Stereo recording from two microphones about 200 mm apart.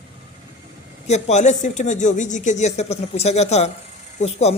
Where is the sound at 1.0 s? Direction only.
35° left (ahead or behind).